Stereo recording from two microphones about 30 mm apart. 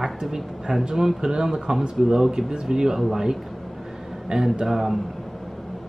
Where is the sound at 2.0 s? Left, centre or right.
Centre.